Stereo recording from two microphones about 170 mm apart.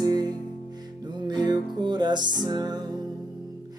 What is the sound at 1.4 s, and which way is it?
Music, 25° right (ahead or behind).